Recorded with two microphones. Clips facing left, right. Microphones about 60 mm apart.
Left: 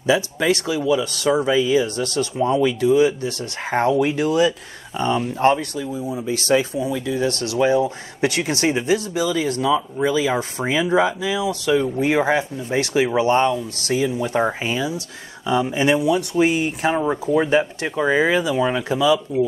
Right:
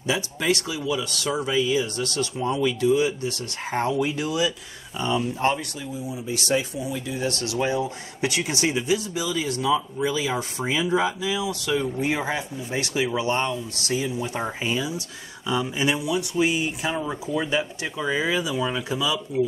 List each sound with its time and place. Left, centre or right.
0.0 s speech: left